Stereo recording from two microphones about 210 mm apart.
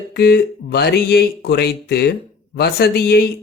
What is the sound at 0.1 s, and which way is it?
A man's voice, 50° left (ahead or behind).